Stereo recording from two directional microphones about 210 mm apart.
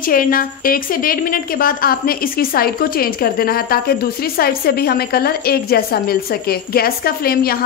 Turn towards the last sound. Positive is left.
turn(degrees=45)  # may be behind; listen again after turning